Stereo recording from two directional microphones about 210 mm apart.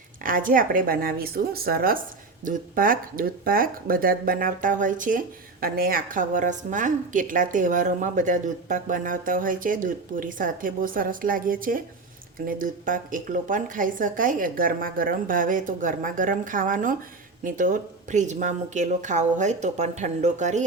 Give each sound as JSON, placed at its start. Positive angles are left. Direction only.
{"t": 0.2, "sound": "a woman's voice", "side_deg": -40}